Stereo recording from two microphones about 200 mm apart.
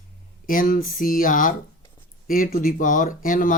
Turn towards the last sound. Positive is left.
turn(degrees=40)  # may be behind; listen again after turning